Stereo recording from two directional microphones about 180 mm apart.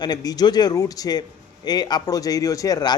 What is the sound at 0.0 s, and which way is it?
A man's voice, 20° left (ahead or behind).